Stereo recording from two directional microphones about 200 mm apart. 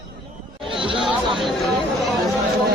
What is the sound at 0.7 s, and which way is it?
Chatter, 25° right (ahead or behind).